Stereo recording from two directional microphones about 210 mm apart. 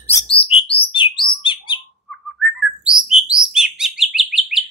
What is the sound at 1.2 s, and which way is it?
Bird, 25° left (ahead or behind).